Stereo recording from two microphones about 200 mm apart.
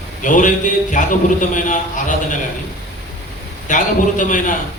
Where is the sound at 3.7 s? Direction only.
40° left (ahead or behind).